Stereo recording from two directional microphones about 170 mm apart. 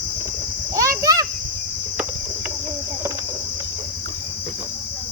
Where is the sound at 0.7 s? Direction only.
20° right (ahead or behind).